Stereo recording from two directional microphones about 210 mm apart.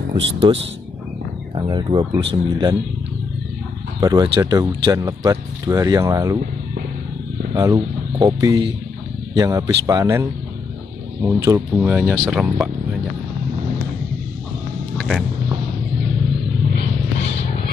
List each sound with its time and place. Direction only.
0.5 s speech: 25° right (ahead or behind)
1.7 s speech: 20° right (ahead or behind)
4.0 s speech: 20° right (ahead or behind)
7.5 s speech: 15° right (ahead or behind)
11.2 s speech: 15° right (ahead or behind)
15.0 s a sound: centre (ahead or behind)